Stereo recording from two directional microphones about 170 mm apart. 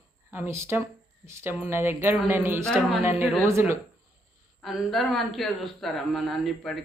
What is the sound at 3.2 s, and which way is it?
Speech, 15° right (ahead or behind).